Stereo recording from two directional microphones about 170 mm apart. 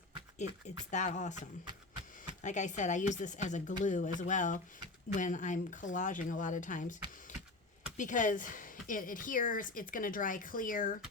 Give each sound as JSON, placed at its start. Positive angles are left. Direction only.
{"t": 0.3, "sound": "a woman's voice", "side_deg": 45}
{"t": 2.4, "sound": "a woman's voice", "side_deg": 45}
{"t": 7.9, "sound": "a woman's voice", "side_deg": 50}